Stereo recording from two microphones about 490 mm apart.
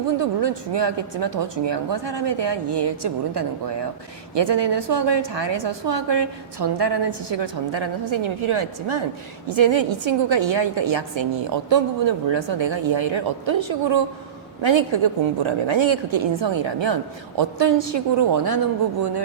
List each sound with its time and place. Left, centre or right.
0.2 s a woman's voice: right